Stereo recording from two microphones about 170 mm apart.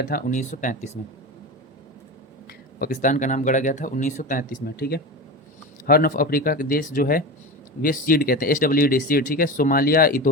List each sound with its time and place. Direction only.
0.0 s speech: 55° left (ahead or behind)
2.5 s speech: 60° left (ahead or behind)